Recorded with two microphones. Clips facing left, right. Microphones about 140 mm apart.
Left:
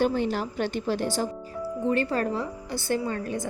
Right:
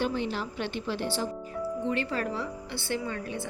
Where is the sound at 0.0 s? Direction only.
45° left (ahead or behind).